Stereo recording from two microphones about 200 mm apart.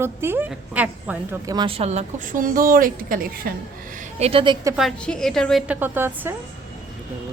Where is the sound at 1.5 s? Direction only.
30° right (ahead or behind); by 3.5 s 45° right (ahead or behind).